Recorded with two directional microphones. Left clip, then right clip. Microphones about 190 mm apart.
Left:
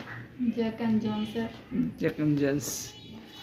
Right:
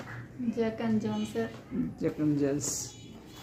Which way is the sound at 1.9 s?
10° left (ahead or behind).